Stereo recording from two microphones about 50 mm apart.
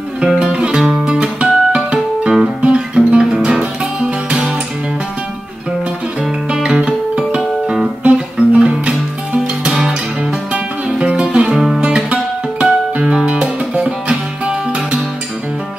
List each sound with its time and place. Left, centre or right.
0.4 s music: centre
4.3 s music: centre
6.5 s music: centre
10.5 s music: centre